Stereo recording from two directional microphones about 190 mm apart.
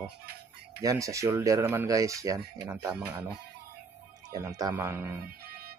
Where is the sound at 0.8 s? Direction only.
15° right (ahead or behind).